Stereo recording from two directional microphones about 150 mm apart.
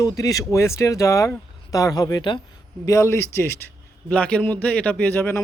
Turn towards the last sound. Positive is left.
turn(degrees=10)  # may be behind; listen again after turning